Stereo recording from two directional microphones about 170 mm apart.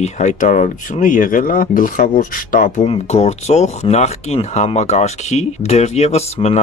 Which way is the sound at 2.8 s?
35° left (ahead or behind).